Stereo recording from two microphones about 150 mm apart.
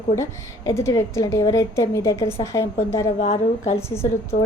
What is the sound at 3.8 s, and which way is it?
Speech, 15° left (ahead or behind).